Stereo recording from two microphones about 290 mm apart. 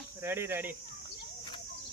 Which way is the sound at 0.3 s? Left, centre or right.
Centre.